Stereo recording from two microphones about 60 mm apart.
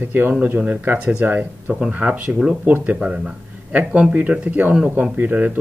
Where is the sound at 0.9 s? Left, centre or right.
Right.